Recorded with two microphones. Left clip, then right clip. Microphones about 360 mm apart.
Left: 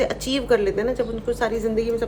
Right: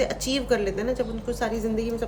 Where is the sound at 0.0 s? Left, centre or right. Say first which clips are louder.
Left 3 dB; centre.